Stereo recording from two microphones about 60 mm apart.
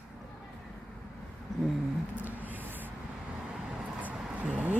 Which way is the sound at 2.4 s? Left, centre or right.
Right.